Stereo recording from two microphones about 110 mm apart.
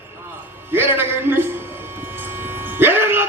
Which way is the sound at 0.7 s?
20° right (ahead or behind).